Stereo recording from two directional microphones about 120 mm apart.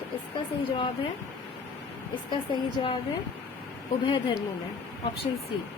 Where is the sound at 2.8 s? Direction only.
40° left (ahead or behind).